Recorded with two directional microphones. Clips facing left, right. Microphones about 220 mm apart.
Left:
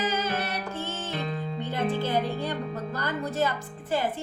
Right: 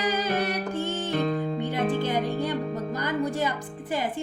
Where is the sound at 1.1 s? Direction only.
50° right (ahead or behind).